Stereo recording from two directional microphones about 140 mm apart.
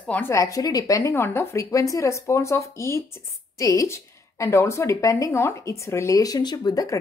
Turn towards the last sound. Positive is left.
turn(degrees=25)  # may be behind; listen again after turning